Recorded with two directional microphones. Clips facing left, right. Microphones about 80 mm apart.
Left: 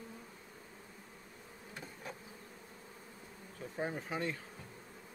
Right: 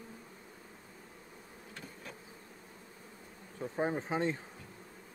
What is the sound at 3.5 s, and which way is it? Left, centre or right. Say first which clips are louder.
Bee: right 6 dB; right.